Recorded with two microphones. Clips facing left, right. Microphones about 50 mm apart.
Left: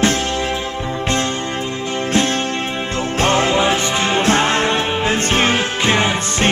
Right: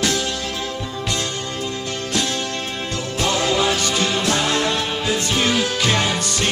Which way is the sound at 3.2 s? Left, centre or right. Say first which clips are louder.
Left 4 dB; left.